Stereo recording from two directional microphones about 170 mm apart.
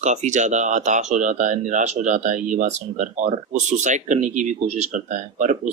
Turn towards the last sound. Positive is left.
turn(degrees=-45)  # may be behind; listen again after turning